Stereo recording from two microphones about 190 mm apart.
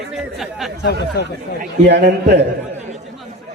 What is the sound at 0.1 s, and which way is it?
Speech, centre (ahead or behind).